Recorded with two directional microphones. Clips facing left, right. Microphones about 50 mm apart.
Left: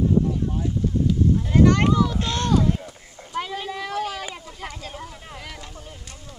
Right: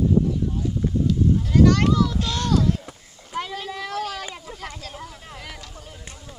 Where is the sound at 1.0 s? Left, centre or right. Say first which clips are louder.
Even; centre.